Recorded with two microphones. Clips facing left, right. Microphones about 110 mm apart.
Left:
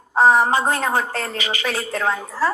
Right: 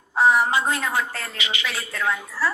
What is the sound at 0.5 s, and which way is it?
A woman's voice, 40° left (ahead or behind).